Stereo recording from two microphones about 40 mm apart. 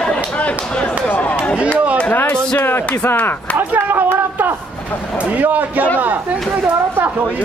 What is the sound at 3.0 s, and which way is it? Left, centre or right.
Speech, left.